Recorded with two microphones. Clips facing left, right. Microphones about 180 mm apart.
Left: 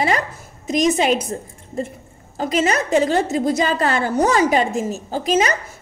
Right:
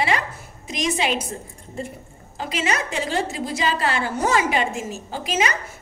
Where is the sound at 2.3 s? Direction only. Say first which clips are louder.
Left 6 dB; 45° left (ahead or behind).